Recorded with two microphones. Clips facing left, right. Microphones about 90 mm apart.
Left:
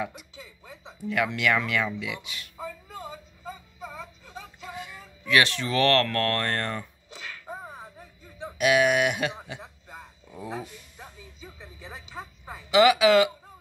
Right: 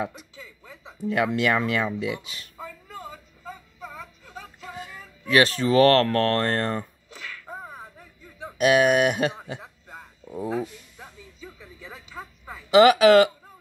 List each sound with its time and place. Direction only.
0.0 s speech: 35° right (ahead or behind)
4.7 s speech: 35° right (ahead or behind)
8.5 s speech: 40° right (ahead or behind)
10.3 s speech: 30° right (ahead or behind)
12.7 s speech: 50° right (ahead or behind)